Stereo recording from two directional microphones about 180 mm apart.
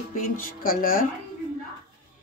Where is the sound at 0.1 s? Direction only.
50° left (ahead or behind).